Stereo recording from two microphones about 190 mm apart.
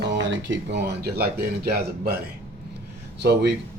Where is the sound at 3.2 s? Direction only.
60° right (ahead or behind).